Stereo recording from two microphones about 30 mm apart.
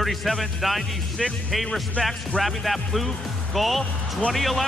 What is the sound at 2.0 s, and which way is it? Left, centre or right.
Speech, left.